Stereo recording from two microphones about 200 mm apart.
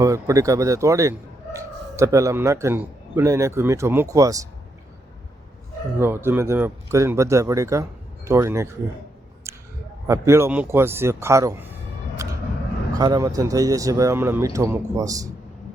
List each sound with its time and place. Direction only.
0.0 s speech: 15° right (ahead or behind)
6.0 s speech: 10° right (ahead or behind)
10.1 s speech: 15° right (ahead or behind)
13.0 s speech: 20° right (ahead or behind)